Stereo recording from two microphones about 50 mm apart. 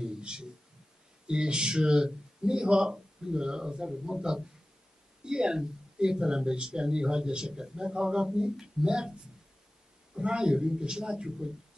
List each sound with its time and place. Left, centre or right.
0.0 s a sound: centre
1.2 s speech: centre
10.1 s speech: centre